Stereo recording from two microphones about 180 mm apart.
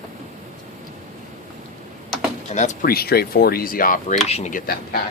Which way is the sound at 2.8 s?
60° left (ahead or behind).